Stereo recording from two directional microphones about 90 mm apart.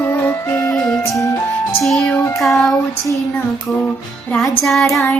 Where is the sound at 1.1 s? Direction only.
35° left (ahead or behind).